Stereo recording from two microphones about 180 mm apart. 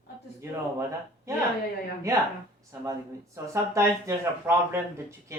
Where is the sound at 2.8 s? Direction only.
15° right (ahead or behind).